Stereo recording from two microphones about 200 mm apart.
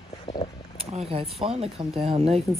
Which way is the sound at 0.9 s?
30° right (ahead or behind).